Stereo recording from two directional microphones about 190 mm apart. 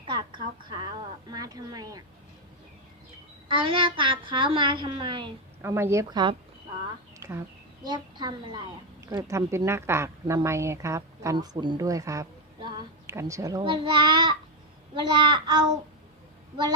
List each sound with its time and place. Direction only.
0.1 s a sound: 25° right (ahead or behind)
1.3 s speech: 20° right (ahead or behind)
3.5 s a woman's voice: 25° right (ahead or behind)
5.6 s a woman's voice: 15° right (ahead or behind)
7.2 s a sound: 15° right (ahead or behind)
7.9 s a woman's voice: 25° right (ahead or behind)